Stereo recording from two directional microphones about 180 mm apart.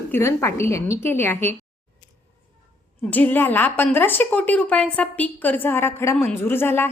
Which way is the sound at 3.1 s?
10° left (ahead or behind).